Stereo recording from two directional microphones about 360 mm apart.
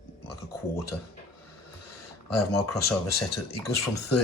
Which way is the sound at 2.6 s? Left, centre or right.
Left.